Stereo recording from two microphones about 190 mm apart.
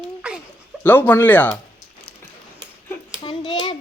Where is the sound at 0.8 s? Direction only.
10° left (ahead or behind).